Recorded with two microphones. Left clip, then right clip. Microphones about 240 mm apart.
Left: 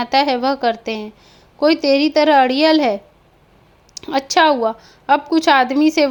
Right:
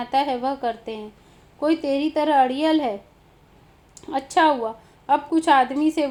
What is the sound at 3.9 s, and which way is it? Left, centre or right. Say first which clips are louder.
A woman's voice: left 5 dB; left.